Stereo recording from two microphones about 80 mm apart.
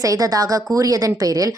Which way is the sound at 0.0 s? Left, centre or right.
Right.